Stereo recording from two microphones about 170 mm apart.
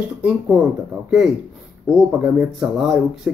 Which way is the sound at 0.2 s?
5° right (ahead or behind).